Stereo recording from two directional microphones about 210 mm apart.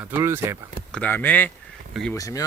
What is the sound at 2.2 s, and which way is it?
Speech, 15° left (ahead or behind).